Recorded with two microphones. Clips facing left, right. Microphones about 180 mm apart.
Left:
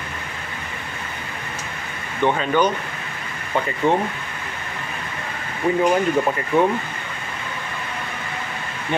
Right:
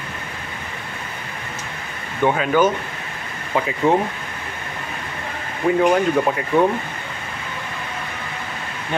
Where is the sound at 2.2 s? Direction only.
5° right (ahead or behind).